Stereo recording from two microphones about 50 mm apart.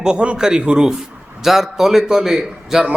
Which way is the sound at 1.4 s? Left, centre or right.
Centre.